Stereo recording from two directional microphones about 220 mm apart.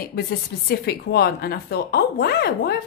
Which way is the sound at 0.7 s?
45° left (ahead or behind).